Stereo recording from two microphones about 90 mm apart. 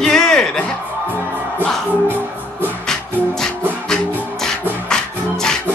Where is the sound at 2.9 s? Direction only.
5° left (ahead or behind).